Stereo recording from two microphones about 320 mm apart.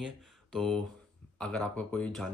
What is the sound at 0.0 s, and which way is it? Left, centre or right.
Speech, centre.